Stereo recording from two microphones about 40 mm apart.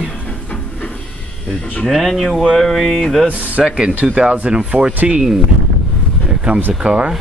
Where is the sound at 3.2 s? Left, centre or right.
Right.